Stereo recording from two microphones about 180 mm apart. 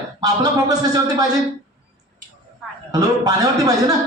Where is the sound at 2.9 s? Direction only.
20° right (ahead or behind).